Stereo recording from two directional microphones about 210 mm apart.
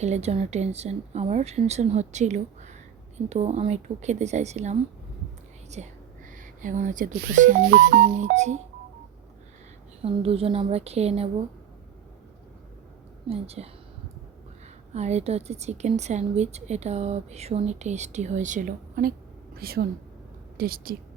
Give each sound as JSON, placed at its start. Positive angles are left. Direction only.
{"t": 0.0, "sound": "a woman's voice", "side_deg": -30}
{"t": 6.3, "sound": "speech", "side_deg": -40}
{"t": 7.7, "sound": "speech", "side_deg": -55}
{"t": 10.0, "sound": "a woman's voice", "side_deg": -25}
{"t": 13.2, "sound": "a woman's voice", "side_deg": -30}
{"t": 14.9, "sound": "a woman's voice", "side_deg": -30}